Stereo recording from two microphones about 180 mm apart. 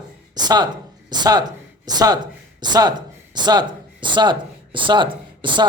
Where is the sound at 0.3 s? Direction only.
25° right (ahead or behind).